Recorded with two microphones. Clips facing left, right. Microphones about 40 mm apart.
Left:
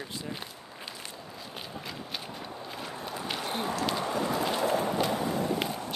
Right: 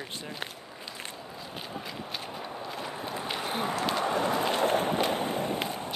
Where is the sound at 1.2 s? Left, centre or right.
Centre.